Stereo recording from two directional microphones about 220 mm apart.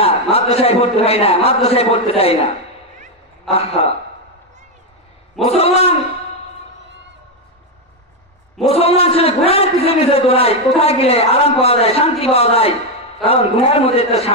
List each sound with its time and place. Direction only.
0.0 s a man's voice: 25° left (ahead or behind)
5.5 s a man's voice: 25° left (ahead or behind)
8.6 s a man's voice: 25° left (ahead or behind)